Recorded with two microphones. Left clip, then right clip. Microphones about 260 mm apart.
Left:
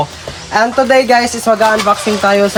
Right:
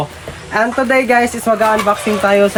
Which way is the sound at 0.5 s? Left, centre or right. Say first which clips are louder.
Left 4 dB; centre.